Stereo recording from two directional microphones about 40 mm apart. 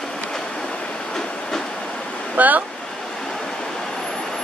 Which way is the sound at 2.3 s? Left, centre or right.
Right.